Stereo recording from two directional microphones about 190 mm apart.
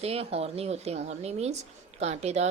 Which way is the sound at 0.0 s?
30° right (ahead or behind).